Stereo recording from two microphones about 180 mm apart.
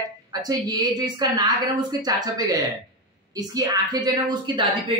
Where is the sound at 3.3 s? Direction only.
20° right (ahead or behind).